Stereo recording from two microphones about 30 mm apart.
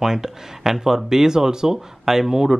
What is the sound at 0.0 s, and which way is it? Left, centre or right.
Speech, centre.